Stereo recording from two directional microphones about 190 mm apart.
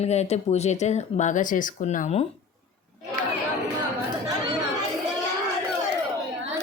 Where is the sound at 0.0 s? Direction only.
35° left (ahead or behind).